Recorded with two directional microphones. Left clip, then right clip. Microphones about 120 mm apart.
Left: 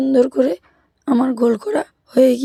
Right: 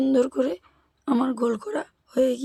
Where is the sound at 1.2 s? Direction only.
35° left (ahead or behind); by 2.4 s 55° left (ahead or behind).